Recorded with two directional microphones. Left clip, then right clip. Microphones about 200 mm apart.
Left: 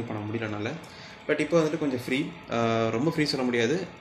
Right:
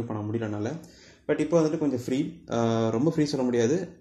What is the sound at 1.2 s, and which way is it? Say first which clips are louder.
Speech: even; 35° right (ahead or behind).